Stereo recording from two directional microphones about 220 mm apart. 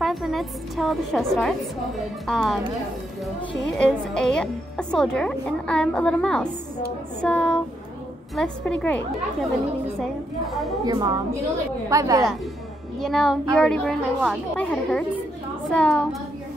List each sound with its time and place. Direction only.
0.0 s a woman's voice: centre (ahead or behind)
3.7 s a woman's voice: 5° left (ahead or behind)
10.9 s a woman's voice: 15° right (ahead or behind)
13.0 s a woman's voice: centre (ahead or behind)